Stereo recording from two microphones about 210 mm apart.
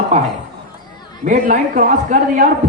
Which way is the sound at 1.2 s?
40° right (ahead or behind).